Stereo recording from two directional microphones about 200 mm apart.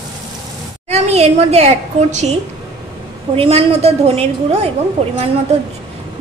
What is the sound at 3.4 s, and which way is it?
A woman's voice, 30° right (ahead or behind).